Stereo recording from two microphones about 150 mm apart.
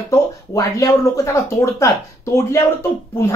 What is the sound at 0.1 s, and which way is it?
Speech, 20° left (ahead or behind).